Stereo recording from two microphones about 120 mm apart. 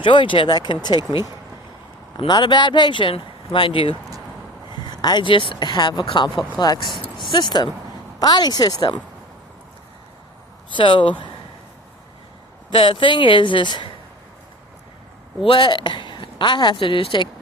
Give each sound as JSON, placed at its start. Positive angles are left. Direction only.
{"t": 0.0, "sound": "speech", "side_deg": 45}
{"t": 10.7, "sound": "speech", "side_deg": 45}
{"t": 12.7, "sound": "speech", "side_deg": 45}
{"t": 15.4, "sound": "a woman's voice", "side_deg": 40}